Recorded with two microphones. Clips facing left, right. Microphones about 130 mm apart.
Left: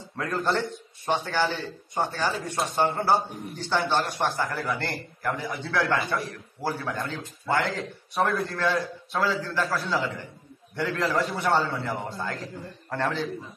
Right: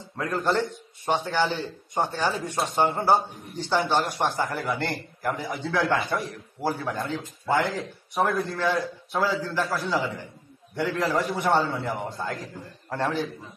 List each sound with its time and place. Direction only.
0.2 s a man's voice: 15° right (ahead or behind)